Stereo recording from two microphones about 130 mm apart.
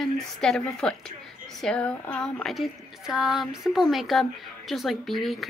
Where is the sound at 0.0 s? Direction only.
Centre (ahead or behind).